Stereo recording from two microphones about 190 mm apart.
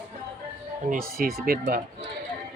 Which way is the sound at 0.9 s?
50° right (ahead or behind).